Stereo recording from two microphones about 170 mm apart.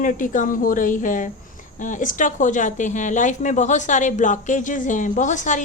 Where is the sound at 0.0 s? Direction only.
50° left (ahead or behind).